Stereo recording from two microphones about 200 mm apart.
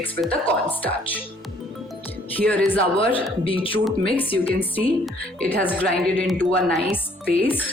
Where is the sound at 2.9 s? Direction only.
25° left (ahead or behind).